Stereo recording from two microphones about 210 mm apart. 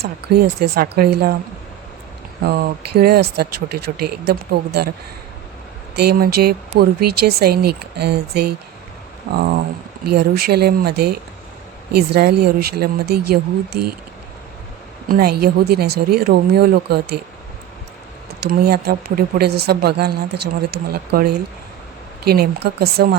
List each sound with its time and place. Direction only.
0.0 s a woman's voice: 50° right (ahead or behind)
2.4 s a woman's voice: 50° right (ahead or behind)
6.0 s a woman's voice: 50° right (ahead or behind)
15.1 s a woman's voice: 45° right (ahead or behind)
18.4 s a woman's voice: 50° right (ahead or behind)
22.3 s a woman's voice: 50° right (ahead or behind)